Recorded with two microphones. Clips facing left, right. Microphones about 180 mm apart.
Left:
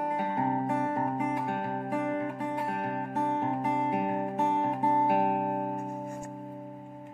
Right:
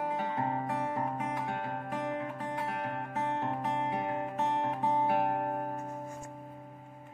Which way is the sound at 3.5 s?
15° left (ahead or behind).